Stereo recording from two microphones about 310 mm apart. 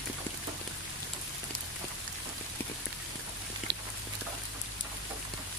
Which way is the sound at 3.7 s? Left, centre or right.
Right.